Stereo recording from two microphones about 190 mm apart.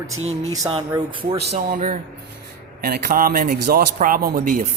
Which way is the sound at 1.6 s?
40° right (ahead or behind).